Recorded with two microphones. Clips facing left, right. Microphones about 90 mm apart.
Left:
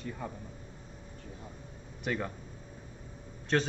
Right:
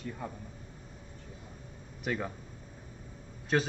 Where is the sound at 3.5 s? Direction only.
5° right (ahead or behind).